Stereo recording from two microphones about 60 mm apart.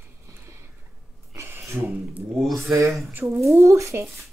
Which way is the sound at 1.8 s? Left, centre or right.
Right.